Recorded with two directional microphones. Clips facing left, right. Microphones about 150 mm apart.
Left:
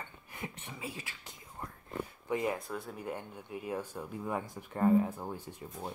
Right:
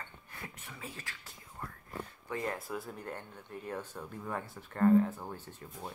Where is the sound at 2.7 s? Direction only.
Centre (ahead or behind).